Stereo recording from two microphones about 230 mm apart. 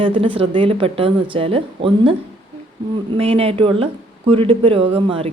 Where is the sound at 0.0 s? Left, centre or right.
Right.